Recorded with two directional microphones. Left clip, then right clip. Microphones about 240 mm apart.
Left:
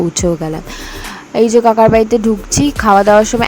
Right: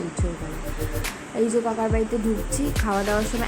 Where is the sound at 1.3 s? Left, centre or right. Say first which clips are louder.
Left 15 dB; left.